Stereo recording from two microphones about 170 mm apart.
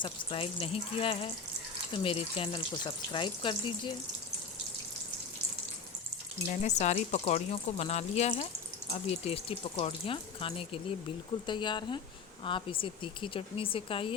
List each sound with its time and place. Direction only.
0.0 s speech: 30° left (ahead or behind)
6.5 s speech: 45° left (ahead or behind)